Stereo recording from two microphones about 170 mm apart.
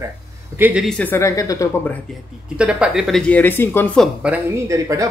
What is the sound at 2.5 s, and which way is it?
Speech, 5° right (ahead or behind).